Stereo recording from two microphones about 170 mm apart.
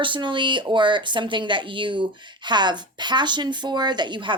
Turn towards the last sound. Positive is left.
turn(degrees=-30)  # may be behind; listen again after turning